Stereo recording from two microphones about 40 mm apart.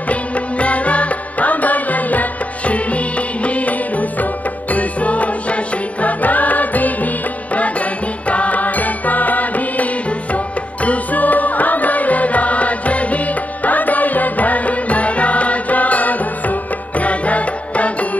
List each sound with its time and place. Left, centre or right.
0.1 s music: left
4.7 s music: left
8.3 s music: left